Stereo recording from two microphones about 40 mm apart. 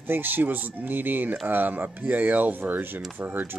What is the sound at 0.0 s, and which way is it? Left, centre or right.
Speech, right.